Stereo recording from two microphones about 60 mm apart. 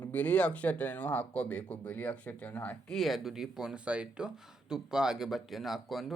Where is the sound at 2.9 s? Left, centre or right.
Centre.